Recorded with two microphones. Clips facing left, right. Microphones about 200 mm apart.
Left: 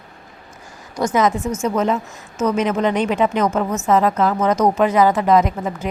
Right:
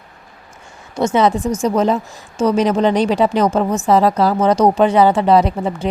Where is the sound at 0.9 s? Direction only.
25° right (ahead or behind).